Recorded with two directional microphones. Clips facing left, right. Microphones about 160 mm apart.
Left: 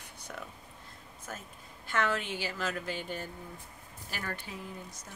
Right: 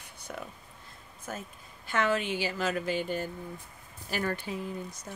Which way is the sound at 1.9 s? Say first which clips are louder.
Right 3 dB; 15° right (ahead or behind).